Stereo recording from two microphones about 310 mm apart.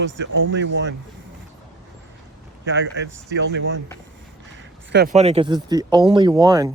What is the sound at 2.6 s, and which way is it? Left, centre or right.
Speech, right.